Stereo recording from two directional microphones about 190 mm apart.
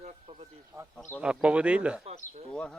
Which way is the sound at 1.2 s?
5° right (ahead or behind).